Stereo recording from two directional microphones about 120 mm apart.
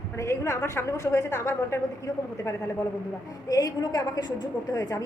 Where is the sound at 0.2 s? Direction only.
25° left (ahead or behind).